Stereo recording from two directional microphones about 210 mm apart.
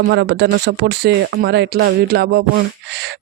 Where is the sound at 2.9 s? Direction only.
50° right (ahead or behind).